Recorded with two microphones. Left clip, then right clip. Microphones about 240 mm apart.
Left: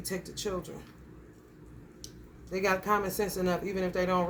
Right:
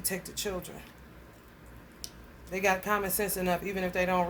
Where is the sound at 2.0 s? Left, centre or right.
Centre.